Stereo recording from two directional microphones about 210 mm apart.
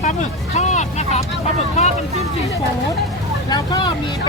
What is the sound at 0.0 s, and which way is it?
Vehicle, 35° left (ahead or behind).